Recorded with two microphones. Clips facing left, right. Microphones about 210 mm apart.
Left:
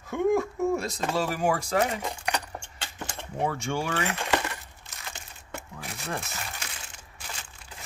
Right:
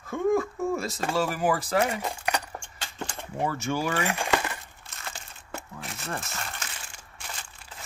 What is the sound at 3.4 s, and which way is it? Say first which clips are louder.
Speech: right 1 dB; 5° right (ahead or behind).